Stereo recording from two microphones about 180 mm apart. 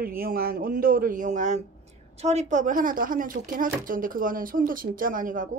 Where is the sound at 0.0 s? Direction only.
55° right (ahead or behind).